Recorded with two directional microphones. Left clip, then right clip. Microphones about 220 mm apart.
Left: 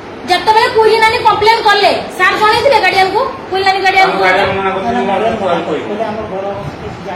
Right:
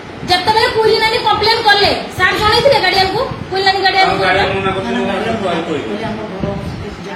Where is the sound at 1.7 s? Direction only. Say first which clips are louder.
Left 1 dB; 20° right (ahead or behind).